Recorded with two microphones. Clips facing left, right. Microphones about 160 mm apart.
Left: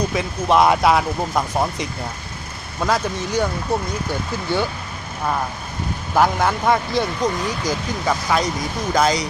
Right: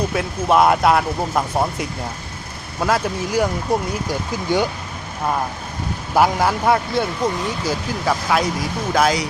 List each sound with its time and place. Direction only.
0.1 s speech: 5° right (ahead or behind)
6.1 s speech: 10° right (ahead or behind)